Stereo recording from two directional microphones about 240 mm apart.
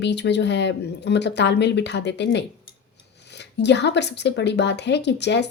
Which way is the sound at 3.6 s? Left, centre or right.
Left.